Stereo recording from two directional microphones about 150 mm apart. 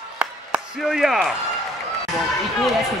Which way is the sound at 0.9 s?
Centre (ahead or behind).